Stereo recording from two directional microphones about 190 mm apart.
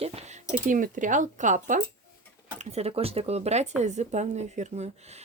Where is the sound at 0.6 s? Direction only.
45° right (ahead or behind).